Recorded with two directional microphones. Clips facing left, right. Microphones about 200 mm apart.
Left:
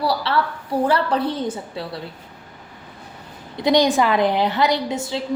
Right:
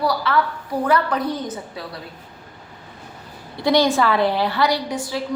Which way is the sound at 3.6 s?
20° left (ahead or behind).